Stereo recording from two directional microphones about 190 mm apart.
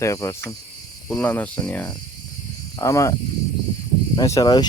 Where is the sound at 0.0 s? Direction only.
15° left (ahead or behind).